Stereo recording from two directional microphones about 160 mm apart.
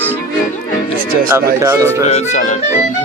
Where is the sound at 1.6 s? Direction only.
15° right (ahead or behind).